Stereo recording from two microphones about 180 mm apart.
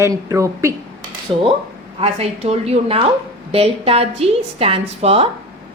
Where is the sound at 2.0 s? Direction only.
35° right (ahead or behind).